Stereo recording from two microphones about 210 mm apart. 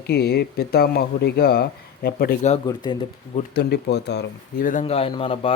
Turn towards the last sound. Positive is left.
turn(degrees=25)  # may be behind; listen again after turning